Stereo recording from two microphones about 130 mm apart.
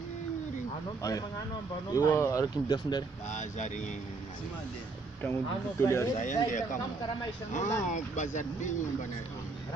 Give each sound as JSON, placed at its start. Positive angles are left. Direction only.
{"t": 1.9, "sound": "speech", "side_deg": 20}
{"t": 3.3, "sound": "speech", "side_deg": 65}
{"t": 5.2, "sound": "speech", "side_deg": 20}
{"t": 6.1, "sound": "speech", "side_deg": 70}